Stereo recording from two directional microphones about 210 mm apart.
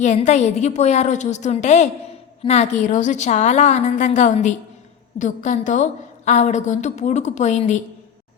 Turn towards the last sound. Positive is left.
turn(degrees=35)  # may be behind; listen again after turning